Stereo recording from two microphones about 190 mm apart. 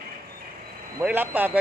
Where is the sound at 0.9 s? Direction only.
10° right (ahead or behind).